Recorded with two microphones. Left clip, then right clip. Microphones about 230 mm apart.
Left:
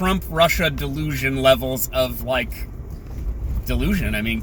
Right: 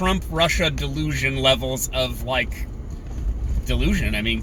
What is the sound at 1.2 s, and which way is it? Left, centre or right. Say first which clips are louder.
Speech: left 3 dB; centre.